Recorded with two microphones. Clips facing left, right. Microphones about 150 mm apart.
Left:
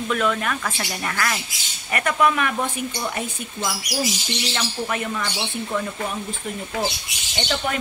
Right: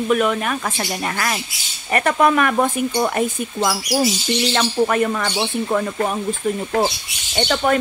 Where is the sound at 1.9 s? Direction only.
35° right (ahead or behind); by 2.7 s 50° right (ahead or behind).